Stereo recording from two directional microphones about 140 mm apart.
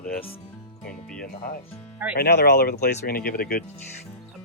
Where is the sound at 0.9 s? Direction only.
5° left (ahead or behind).